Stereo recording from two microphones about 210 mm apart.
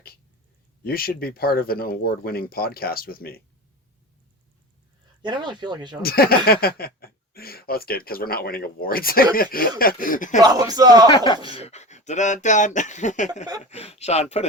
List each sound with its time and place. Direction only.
0.9 s speech: 45° left (ahead or behind)
5.2 s speech: 20° right (ahead or behind)
6.0 s speech: 45° left (ahead or behind)
10.4 s speech: 20° right (ahead or behind)
11.1 s speech: 20° left (ahead or behind)